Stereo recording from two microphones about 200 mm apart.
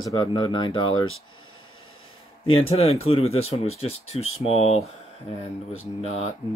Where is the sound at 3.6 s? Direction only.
90° left.